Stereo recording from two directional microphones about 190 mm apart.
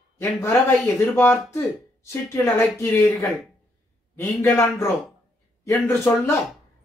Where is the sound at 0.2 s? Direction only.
15° left (ahead or behind).